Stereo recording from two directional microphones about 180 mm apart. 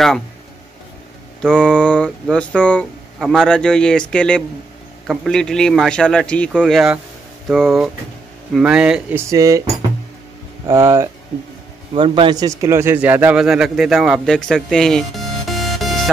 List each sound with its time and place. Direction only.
1.4 s speech: 5° left (ahead or behind)
9.3 s speech: 20° right (ahead or behind); by 15.9 s centre (ahead or behind)